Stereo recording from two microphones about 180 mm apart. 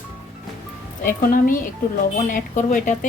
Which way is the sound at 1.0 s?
50° left (ahead or behind).